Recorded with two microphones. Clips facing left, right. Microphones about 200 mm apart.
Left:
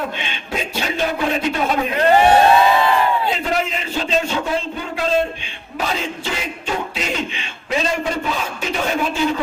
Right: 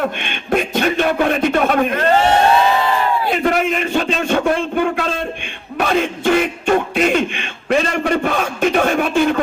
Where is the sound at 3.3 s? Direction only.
60° right (ahead or behind).